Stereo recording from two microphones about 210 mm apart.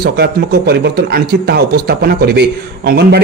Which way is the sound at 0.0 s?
50° right (ahead or behind).